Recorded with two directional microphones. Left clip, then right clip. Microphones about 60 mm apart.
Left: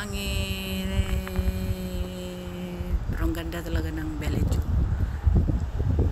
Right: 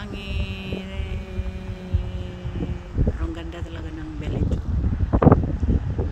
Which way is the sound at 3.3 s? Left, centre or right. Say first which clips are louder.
Left 3 dB; left.